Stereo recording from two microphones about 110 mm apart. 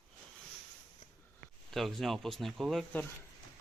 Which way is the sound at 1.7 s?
Centre (ahead or behind).